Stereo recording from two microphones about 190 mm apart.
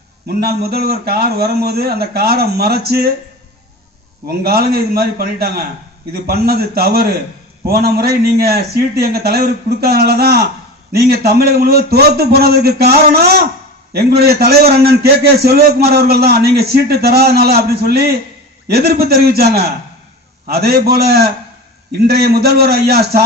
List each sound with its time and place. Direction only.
0.3 s a man's voice: 55° right (ahead or behind)
4.3 s a man's voice: 55° right (ahead or behind)